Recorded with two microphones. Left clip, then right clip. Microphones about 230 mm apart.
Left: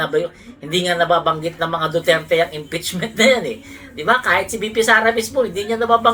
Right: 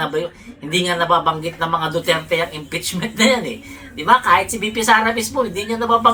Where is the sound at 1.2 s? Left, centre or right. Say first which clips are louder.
Even; right.